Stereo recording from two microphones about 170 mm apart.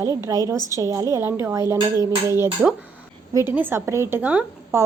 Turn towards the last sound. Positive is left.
turn(degrees=-10)  # may be behind; listen again after turning